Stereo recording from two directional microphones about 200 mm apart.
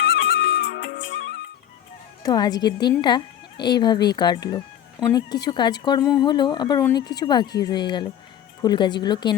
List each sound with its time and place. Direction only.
0.0 s music: 55° left (ahead or behind)
2.2 s a woman's voice: 20° left (ahead or behind)